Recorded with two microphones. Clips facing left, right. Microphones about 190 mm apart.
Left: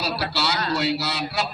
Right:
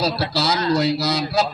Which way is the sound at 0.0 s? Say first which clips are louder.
Right 5 dB; 40° right (ahead or behind).